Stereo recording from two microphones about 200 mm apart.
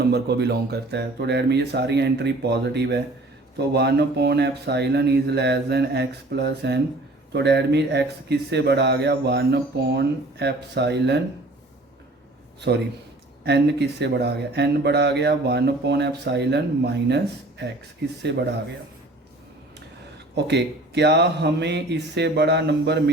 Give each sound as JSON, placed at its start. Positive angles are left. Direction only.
{"t": 0.0, "sound": "speech", "side_deg": -55}
{"t": 12.7, "sound": "speech", "side_deg": -55}
{"t": 20.3, "sound": "speech", "side_deg": -60}